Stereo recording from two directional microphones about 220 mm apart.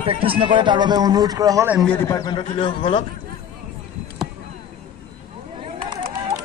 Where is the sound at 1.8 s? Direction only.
10° left (ahead or behind).